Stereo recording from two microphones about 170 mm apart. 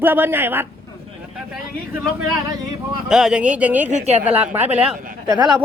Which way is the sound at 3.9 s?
45° right (ahead or behind).